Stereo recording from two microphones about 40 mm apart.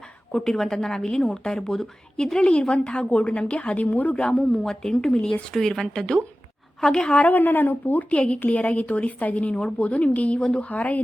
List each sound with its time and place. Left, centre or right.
0.3 s a woman's voice: centre
7.3 s speech: left
8.1 s a woman's voice: left
8.4 s a woman's voice: left
9.6 s a woman's voice: centre
9.8 s a woman's voice: left